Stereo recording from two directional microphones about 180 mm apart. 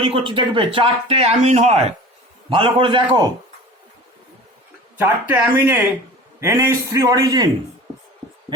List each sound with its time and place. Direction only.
0.3 s a man's voice: 30° right (ahead or behind)
4.9 s a man's voice: 10° right (ahead or behind)